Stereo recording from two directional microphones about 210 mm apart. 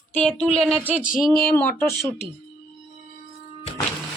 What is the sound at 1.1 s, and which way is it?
Speech, centre (ahead or behind).